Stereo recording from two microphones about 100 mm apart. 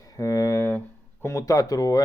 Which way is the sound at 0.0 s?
35° left (ahead or behind).